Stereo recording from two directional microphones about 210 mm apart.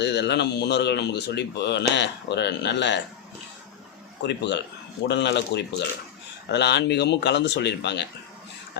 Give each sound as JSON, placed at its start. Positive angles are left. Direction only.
{"t": 0.0, "sound": "speech", "side_deg": 55}
{"t": 4.2, "sound": "speech", "side_deg": 55}